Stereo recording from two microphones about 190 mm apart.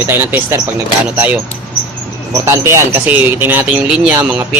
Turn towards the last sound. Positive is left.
turn(degrees=-5)  # may be behind; listen again after turning